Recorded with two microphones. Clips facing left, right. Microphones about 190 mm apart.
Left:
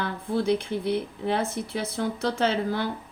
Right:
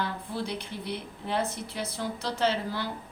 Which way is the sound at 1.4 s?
25° left (ahead or behind).